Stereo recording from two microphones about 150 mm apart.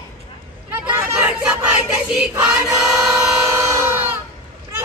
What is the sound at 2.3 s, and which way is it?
Choir, 5° right (ahead or behind).